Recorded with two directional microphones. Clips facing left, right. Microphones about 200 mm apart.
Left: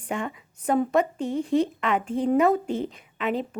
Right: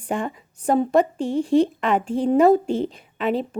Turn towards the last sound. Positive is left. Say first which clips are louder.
# right 4 dB
turn(degrees=-30)  # may be behind; listen again after turning